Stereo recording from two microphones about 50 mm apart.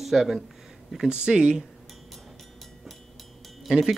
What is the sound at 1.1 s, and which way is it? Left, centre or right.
Speech, centre.